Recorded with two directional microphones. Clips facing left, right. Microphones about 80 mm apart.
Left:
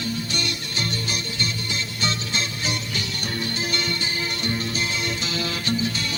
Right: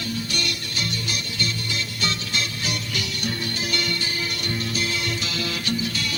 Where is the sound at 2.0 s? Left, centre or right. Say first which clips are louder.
Left 1 dB; left.